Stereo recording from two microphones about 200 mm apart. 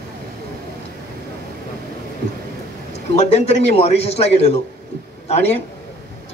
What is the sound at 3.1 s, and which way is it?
Speech, 30° left (ahead or behind).